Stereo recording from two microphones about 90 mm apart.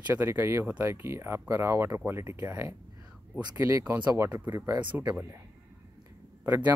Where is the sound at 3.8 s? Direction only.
25° right (ahead or behind).